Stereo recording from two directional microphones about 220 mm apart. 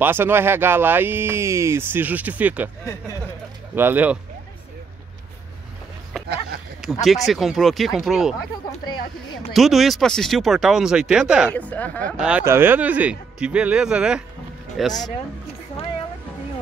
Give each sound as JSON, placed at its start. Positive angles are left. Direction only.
{"t": 0.0, "sound": "speech", "side_deg": -10}
{"t": 2.8, "sound": "speech", "side_deg": 15}
{"t": 3.7, "sound": "speech", "side_deg": -10}
{"t": 6.2, "sound": "a sound", "side_deg": -45}
{"t": 6.8, "sound": "speech", "side_deg": 0}
{"t": 9.5, "sound": "speech", "side_deg": 0}
{"t": 11.5, "sound": "speech", "side_deg": 5}
{"t": 12.1, "sound": "speech", "side_deg": -5}